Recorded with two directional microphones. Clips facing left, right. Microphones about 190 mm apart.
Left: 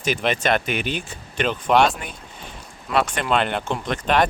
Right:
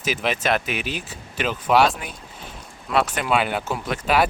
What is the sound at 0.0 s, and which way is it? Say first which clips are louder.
Speech: left 2 dB; 5° right (ahead or behind).